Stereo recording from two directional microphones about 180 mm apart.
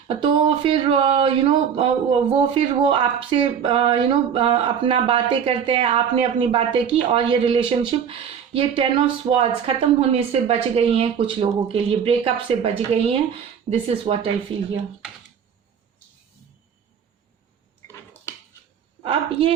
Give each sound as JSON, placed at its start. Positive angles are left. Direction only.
{"t": 0.1, "sound": "speech", "side_deg": -25}
{"t": 19.0, "sound": "speech", "side_deg": -30}